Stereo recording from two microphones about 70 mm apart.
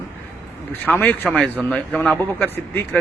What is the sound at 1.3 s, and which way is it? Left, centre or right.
A man's voice, centre.